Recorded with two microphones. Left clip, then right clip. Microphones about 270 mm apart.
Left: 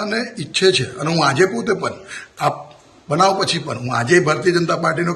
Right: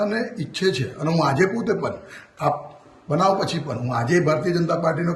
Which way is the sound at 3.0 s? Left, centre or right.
Centre.